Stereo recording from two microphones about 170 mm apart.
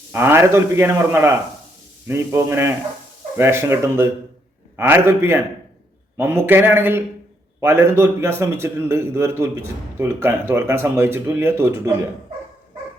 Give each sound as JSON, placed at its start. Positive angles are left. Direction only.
{"t": 0.1, "sound": "a man's voice", "side_deg": -15}